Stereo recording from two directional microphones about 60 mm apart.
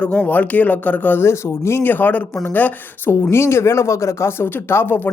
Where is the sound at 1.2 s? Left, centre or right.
Left.